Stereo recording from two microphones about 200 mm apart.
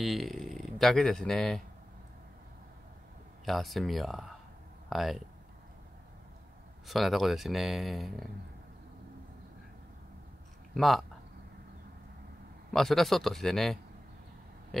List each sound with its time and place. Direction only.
0.0 s speech: centre (ahead or behind)
3.4 s speech: centre (ahead or behind)
6.9 s speech: centre (ahead or behind)
10.7 s speech: centre (ahead or behind)
12.7 s speech: centre (ahead or behind)